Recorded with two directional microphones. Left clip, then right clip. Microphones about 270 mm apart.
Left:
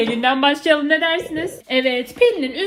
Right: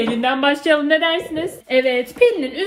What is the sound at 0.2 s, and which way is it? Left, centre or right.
A woman's voice, left.